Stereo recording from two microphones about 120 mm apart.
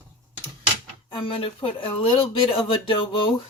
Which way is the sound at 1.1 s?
50° left (ahead or behind).